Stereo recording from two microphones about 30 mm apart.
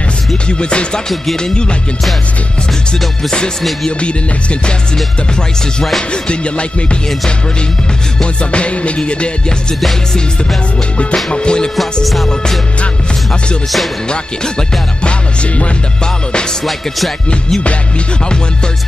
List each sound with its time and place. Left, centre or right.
0.5 s music: left
4.0 s music: left
6.2 s music: left
8.2 s music: left
11.3 s music: left
11.7 s music: centre
14.0 s music: left
15.0 s music: left